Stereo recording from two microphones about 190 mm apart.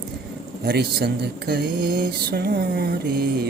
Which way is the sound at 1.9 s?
50° right (ahead or behind).